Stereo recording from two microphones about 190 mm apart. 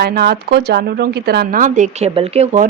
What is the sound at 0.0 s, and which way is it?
Speech, 55° right (ahead or behind).